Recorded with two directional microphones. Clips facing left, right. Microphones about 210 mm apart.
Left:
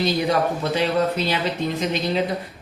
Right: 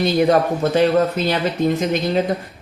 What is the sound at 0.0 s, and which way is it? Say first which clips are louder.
Speech: right 5 dB; 50° right (ahead or behind).